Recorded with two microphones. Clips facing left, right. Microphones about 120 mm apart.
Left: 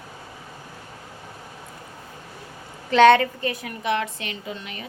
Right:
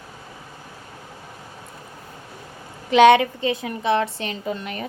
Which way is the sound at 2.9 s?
15° right (ahead or behind).